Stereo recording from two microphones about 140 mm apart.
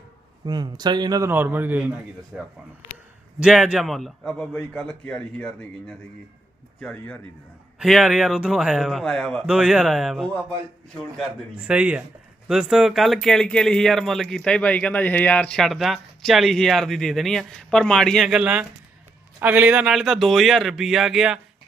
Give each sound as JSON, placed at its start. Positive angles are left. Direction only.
{"t": 0.4, "sound": "a man's voice", "side_deg": -30}
{"t": 1.3, "sound": "a man's voice", "side_deg": -15}
{"t": 7.8, "sound": "speech", "side_deg": 0}
{"t": 11.5, "sound": "a man's voice", "side_deg": -10}